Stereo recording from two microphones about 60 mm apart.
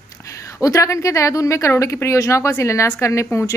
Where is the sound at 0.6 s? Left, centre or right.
Left.